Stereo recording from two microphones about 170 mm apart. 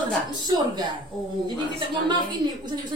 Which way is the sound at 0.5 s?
25° right (ahead or behind).